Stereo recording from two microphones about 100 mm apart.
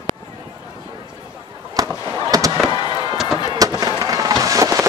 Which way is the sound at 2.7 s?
50° left (ahead or behind).